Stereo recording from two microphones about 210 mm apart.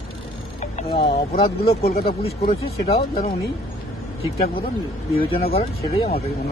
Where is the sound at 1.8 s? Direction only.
45° left (ahead or behind).